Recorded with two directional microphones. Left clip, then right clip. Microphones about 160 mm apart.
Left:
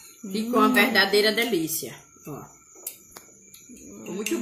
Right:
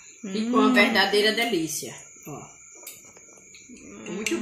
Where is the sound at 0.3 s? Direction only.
10° right (ahead or behind).